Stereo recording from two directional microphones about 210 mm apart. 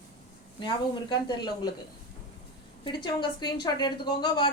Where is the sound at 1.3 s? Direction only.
20° left (ahead or behind).